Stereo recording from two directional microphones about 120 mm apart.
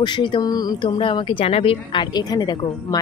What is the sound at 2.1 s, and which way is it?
Speech, 35° left (ahead or behind).